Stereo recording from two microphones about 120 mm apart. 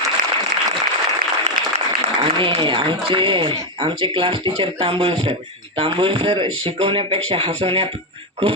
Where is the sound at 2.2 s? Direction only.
45° right (ahead or behind).